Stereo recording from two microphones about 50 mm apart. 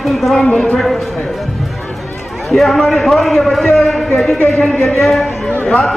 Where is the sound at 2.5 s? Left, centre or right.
Centre.